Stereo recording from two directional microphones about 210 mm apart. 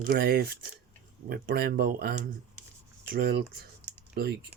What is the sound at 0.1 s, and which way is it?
Speech, 50° right (ahead or behind).